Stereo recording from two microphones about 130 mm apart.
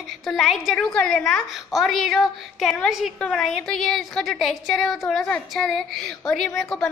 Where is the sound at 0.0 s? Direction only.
Centre (ahead or behind).